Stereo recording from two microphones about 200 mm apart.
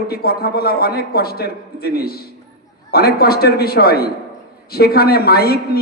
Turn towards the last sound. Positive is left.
turn(degrees=50)  # may be behind; listen again after turning